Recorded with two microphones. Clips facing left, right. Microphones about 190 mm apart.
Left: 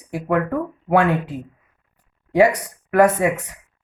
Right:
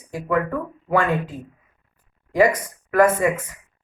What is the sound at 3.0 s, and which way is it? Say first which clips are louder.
Speech: left 1 dB; 70° left (ahead or behind).